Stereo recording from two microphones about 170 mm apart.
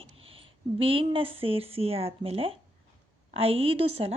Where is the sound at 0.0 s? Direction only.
35° right (ahead or behind).